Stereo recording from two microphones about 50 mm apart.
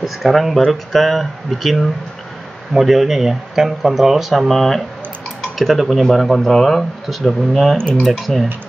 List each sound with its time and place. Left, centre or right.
0.0 s speech: centre